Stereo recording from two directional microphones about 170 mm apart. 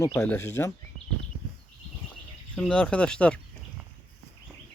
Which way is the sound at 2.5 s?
5° left (ahead or behind).